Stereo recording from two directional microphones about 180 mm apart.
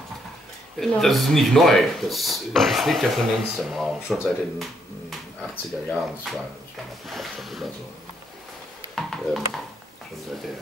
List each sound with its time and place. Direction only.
0.7 s speech: centre (ahead or behind)
8.9 s music: centre (ahead or behind)